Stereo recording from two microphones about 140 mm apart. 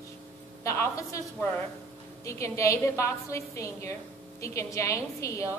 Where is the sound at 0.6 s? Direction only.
20° left (ahead or behind).